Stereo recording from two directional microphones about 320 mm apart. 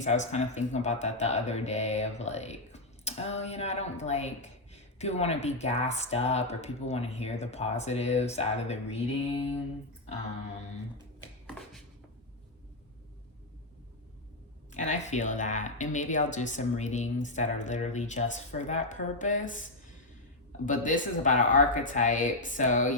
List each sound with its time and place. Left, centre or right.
0.0 s speech: left
14.7 s speech: left
20.7 s speech: left